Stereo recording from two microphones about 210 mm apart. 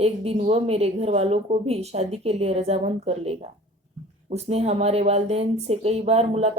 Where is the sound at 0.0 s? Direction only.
30° right (ahead or behind).